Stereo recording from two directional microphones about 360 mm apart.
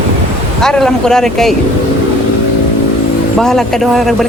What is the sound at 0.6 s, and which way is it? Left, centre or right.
Speech, centre.